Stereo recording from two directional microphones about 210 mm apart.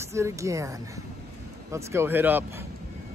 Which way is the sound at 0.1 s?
15° right (ahead or behind).